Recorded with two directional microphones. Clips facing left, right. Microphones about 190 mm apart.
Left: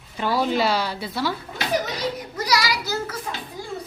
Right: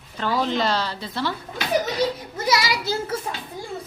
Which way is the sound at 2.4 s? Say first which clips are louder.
Right 1 dB; 25° right (ahead or behind).